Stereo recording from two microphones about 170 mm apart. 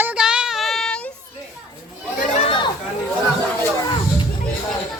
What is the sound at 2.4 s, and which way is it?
Chatter, 30° left (ahead or behind).